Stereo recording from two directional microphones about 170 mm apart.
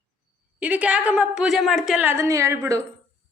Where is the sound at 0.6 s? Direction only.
10° right (ahead or behind).